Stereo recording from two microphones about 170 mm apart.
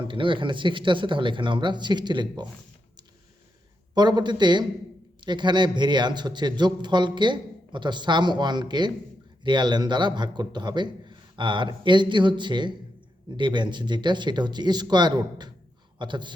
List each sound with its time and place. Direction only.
0.0 s a man's voice: 30° right (ahead or behind)
3.9 s a man's voice: 25° right (ahead or behind)